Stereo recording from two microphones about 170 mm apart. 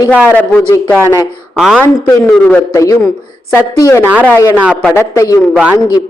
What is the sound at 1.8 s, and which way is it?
A man's voice, 10° left (ahead or behind).